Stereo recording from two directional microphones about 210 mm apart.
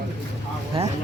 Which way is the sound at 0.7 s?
25° right (ahead or behind).